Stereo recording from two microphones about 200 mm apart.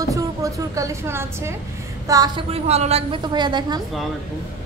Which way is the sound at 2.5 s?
30° right (ahead or behind).